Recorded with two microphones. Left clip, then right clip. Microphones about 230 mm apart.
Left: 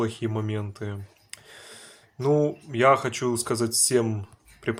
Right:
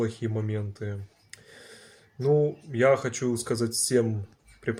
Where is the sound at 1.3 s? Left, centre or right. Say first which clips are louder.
Left 3 dB; centre.